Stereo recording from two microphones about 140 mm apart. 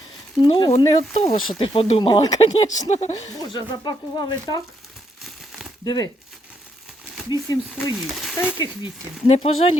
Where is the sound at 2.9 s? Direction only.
50° left (ahead or behind).